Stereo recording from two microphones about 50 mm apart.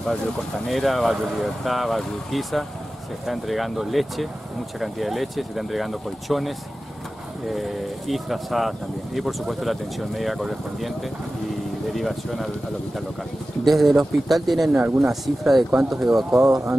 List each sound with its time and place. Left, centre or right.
0.7 s speech: centre
7.5 s speech: centre
11.9 s speech: centre
13.7 s speech: centre
16.3 s speech: right